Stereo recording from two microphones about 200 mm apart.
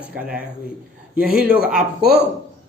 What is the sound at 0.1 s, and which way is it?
A man's voice, 5° right (ahead or behind).